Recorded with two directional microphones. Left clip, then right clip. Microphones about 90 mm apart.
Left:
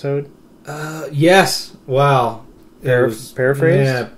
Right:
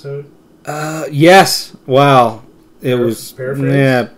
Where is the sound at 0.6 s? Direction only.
35° right (ahead or behind).